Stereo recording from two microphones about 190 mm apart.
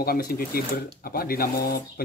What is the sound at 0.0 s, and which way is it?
Speech, 55° left (ahead or behind).